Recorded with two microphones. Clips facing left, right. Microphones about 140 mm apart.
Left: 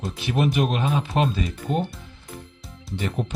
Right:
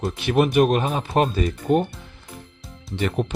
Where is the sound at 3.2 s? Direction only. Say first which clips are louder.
Right 5 dB; 70° right (ahead or behind).